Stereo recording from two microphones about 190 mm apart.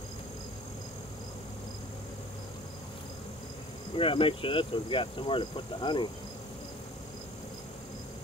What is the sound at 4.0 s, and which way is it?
Speech, 30° left (ahead or behind).